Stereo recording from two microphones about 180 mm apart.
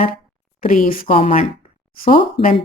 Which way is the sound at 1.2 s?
35° left (ahead or behind).